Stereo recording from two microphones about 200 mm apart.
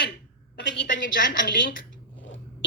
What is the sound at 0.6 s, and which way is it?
A woman's voice, 60° left (ahead or behind).